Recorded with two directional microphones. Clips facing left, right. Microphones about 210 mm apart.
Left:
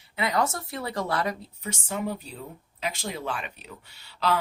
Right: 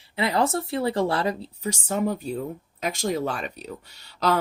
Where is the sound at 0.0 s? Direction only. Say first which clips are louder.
Right 3 dB; 30° right (ahead or behind).